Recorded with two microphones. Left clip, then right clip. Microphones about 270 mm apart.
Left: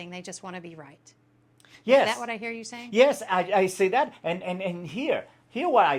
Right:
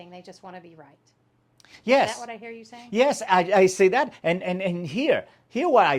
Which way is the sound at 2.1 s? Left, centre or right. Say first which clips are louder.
Left 4 dB; left.